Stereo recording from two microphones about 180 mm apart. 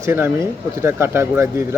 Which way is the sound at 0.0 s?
15° right (ahead or behind).